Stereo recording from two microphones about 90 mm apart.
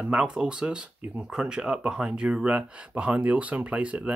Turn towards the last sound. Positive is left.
turn(degrees=-15)  # may be behind; listen again after turning